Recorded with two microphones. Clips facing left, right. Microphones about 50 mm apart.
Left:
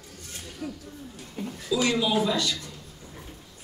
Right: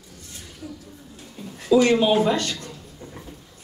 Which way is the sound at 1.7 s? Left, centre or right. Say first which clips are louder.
Right 8 dB; right.